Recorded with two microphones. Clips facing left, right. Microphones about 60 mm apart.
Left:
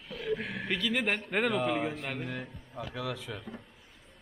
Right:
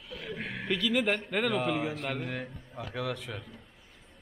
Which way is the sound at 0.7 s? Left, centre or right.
Centre.